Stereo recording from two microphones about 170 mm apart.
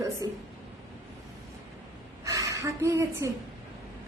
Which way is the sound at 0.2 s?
20° right (ahead or behind).